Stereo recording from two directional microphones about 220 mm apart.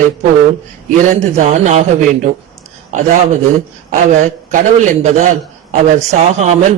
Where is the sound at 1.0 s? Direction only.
35° right (ahead or behind).